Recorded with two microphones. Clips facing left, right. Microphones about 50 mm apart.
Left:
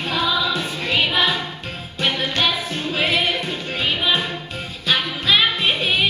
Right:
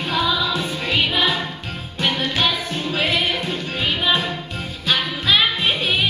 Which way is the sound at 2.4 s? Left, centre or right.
Centre.